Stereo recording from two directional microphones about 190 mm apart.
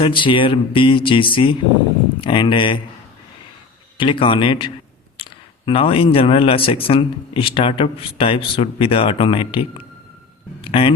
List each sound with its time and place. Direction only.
0.0 s speech: 25° left (ahead or behind)
3.9 s speech: 25° left (ahead or behind)
10.6 s music: 30° left (ahead or behind)